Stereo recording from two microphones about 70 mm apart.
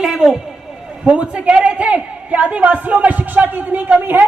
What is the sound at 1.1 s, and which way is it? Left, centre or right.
A man's voice, centre.